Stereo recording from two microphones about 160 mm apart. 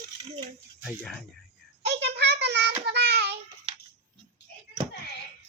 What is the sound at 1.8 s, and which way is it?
Child singing, 90° right.